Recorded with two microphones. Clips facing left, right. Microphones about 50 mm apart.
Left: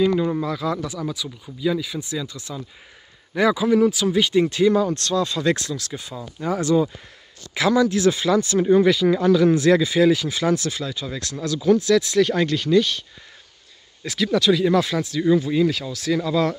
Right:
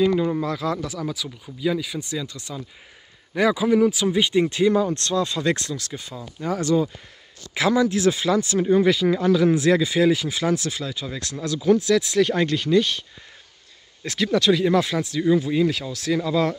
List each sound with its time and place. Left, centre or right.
0.0 s speech: centre
0.5 s speech: right
2.1 s speech: centre
3.3 s speech: centre
7.5 s speech: centre
14.0 s speech: right; by 16.5 s centre